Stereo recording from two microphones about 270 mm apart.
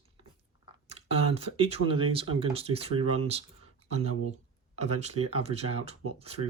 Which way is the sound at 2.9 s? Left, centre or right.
Right.